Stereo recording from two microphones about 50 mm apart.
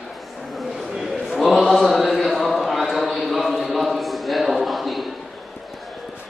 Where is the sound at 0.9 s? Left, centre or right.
Centre.